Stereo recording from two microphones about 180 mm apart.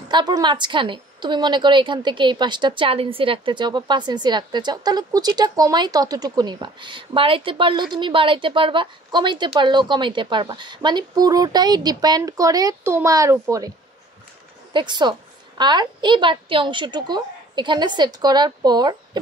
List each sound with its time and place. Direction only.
0.1 s a woman's voice: 25° right (ahead or behind)